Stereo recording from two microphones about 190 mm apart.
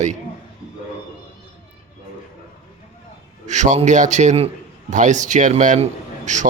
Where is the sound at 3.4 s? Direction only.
40° right (ahead or behind).